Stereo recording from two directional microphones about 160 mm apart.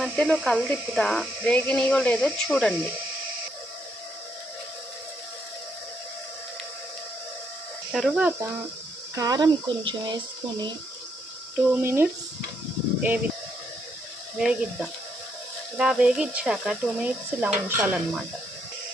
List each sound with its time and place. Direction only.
0.0 s speech: 5° left (ahead or behind)
7.9 s speech: 5° right (ahead or behind)
9.1 s speech: 25° right (ahead or behind)
11.7 s speech: 15° right (ahead or behind)
14.3 s speech: 5° right (ahead or behind)